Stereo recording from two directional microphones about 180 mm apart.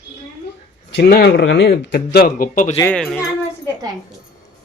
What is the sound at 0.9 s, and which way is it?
Speech, 65° left (ahead or behind).